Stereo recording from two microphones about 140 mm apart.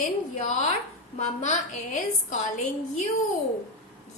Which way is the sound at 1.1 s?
60° left (ahead or behind).